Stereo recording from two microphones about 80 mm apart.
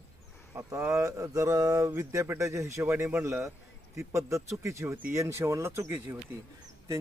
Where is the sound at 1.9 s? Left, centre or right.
Right.